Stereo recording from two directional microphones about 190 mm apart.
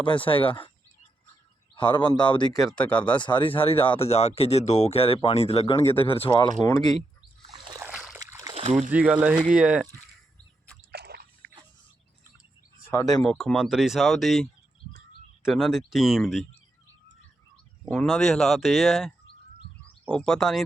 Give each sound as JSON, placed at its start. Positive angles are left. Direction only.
{"t": 0.0, "sound": "speech", "side_deg": 25}
{"t": 1.7, "sound": "speech", "side_deg": 25}
{"t": 2.7, "sound": "speech", "side_deg": 5}
{"t": 3.2, "sound": "speech", "side_deg": 25}
{"t": 6.7, "sound": "speech", "side_deg": 20}
{"t": 7.5, "sound": "splash", "side_deg": -20}
{"t": 7.9, "sound": "splash", "side_deg": -5}
{"t": 8.9, "sound": "speech", "side_deg": -5}
{"t": 10.9, "sound": "a sound", "side_deg": -60}
{"t": 12.9, "sound": "speech", "side_deg": 15}
{"t": 13.2, "sound": "speech", "side_deg": 5}
{"t": 15.4, "sound": "speech", "side_deg": 0}
{"t": 17.8, "sound": "speech", "side_deg": 5}